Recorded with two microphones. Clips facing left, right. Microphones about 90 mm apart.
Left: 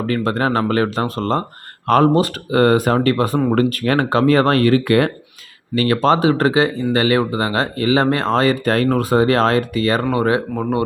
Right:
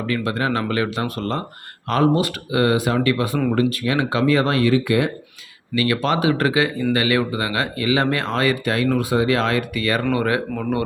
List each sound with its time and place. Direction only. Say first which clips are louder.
0.0 s speech: left 4 dB; 40° left (ahead or behind)
3.5 s speech: left 3 dB; 50° left (ahead or behind)
5.7 s speech: left 5 dB; 40° left (ahead or behind)